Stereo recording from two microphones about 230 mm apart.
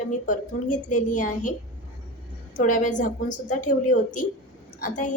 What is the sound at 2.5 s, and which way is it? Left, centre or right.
A woman's voice, left.